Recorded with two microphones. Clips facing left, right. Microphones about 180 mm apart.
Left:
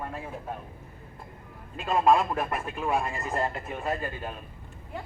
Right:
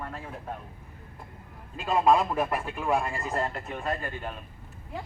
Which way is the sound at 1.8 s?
Centre (ahead or behind).